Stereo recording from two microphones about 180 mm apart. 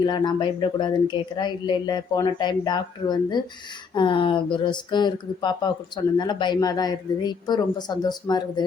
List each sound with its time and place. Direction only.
0.0 s speech: 25° left (ahead or behind)